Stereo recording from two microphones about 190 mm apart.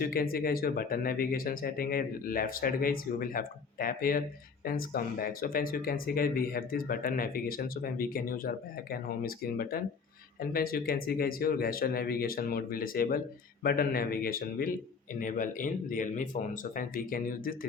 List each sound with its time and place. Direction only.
0.0 s speech: 50° left (ahead or behind)